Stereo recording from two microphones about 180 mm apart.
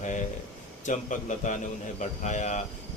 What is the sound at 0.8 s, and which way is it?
A man's voice, 45° left (ahead or behind).